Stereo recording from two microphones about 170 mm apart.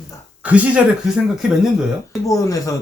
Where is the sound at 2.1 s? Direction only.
20° left (ahead or behind).